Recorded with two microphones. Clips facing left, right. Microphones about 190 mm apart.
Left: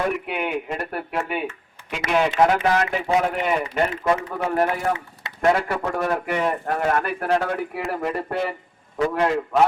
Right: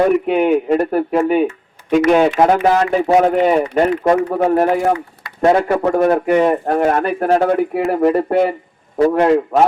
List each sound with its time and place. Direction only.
0.3 s a man's voice: 40° right (ahead or behind)
4.4 s speech: 30° right (ahead or behind)
7.2 s a man's voice: 45° right (ahead or behind)